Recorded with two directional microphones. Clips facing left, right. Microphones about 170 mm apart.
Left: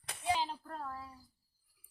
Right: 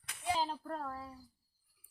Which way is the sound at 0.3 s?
40° right (ahead or behind).